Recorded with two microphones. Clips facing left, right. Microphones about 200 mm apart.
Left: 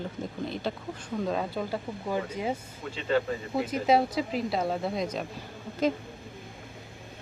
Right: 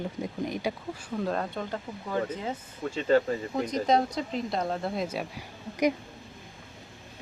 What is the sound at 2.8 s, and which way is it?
Speech, 35° right (ahead or behind).